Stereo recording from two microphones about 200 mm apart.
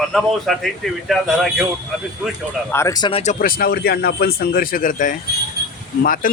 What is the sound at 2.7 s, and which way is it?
Speech, 15° left (ahead or behind).